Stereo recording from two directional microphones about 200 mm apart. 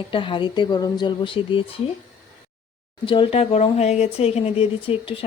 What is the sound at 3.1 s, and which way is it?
Speech, 25° left (ahead or behind).